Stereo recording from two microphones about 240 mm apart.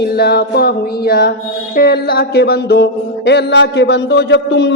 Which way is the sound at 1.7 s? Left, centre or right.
Left.